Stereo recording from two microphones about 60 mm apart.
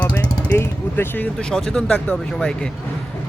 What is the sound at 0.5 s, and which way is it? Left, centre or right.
Speech, left.